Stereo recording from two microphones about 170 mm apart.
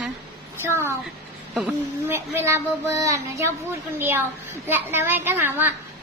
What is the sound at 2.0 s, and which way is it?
Speech, 15° right (ahead or behind).